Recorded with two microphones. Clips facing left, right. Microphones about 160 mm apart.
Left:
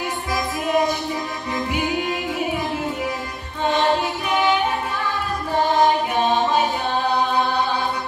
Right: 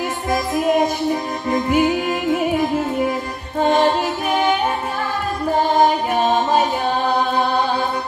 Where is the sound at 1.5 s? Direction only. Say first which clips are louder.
Right 7 dB; 45° right (ahead or behind).